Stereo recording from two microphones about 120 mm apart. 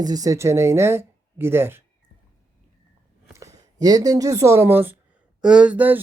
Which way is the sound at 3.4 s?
30° right (ahead or behind).